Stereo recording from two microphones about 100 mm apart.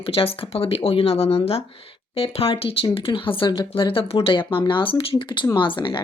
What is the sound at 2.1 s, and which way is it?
A woman's voice, 70° left (ahead or behind).